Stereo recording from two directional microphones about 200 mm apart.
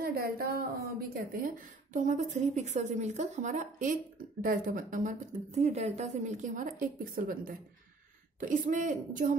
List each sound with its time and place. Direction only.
0.0 s a woman's voice: 50° right (ahead or behind)